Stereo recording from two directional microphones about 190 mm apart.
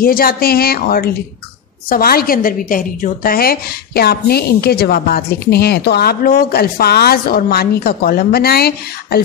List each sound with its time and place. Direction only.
0.0 s a woman's voice: 50° left (ahead or behind)